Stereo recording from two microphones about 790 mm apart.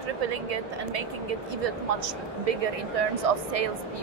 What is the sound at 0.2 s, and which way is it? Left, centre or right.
Speech, right.